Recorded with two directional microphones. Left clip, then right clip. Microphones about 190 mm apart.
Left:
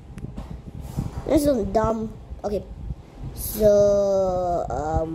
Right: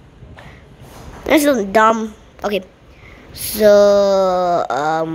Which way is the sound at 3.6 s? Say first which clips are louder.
Right 7 dB; 15° right (ahead or behind).